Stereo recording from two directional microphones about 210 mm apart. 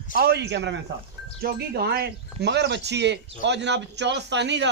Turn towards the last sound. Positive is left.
turn(degrees=-55)  # may be behind; listen again after turning